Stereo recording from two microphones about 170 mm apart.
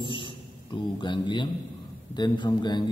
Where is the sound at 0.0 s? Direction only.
30° left (ahead or behind).